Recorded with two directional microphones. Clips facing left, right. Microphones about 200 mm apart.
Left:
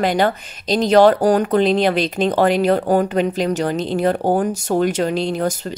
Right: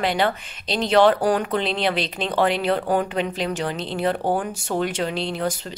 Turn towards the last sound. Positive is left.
turn(degrees=45)  # may be behind; listen again after turning